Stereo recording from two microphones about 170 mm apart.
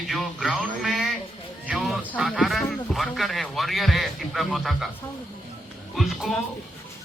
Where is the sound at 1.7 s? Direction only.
Centre (ahead or behind).